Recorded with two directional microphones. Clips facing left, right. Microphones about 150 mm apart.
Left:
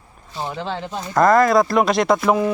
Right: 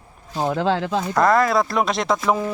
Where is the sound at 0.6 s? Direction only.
90° right.